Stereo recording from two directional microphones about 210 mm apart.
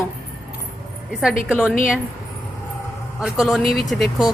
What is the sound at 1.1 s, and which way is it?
Speech, 5° right (ahead or behind).